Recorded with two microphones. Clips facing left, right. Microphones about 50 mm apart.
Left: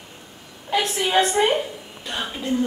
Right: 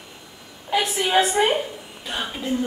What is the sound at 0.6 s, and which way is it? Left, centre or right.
A woman's voice, centre.